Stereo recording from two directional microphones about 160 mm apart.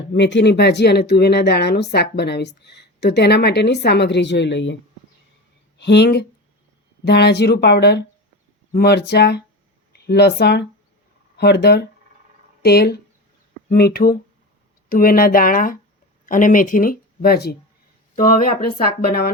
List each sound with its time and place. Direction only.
0.2 s speech: 90° left
5.7 s speech: 90° left
18.2 s speech: 65° left (ahead or behind)